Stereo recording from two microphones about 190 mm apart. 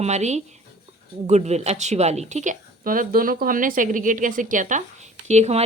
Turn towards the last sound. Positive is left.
turn(degrees=-35)  # may be behind; listen again after turning